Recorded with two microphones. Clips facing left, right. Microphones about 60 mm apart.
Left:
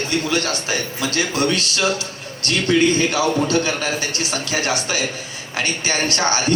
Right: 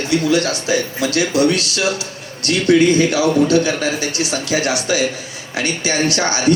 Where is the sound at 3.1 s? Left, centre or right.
Left.